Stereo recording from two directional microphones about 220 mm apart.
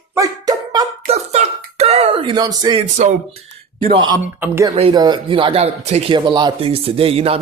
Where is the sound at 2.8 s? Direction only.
30° right (ahead or behind).